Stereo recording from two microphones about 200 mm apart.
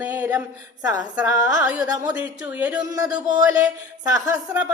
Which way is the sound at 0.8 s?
20° right (ahead or behind).